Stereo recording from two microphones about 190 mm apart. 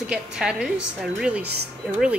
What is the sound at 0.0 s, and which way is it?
A woman's voice, 5° right (ahead or behind).